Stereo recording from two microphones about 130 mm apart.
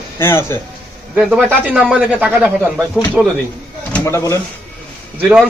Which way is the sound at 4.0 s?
20° left (ahead or behind).